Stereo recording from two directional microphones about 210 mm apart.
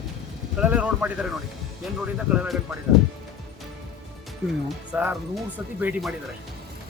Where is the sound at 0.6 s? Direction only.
5° right (ahead or behind).